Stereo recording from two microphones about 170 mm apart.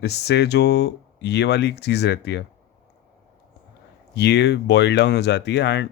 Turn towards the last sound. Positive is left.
turn(degrees=85)